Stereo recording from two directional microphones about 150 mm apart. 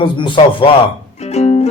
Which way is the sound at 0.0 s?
35° left (ahead or behind).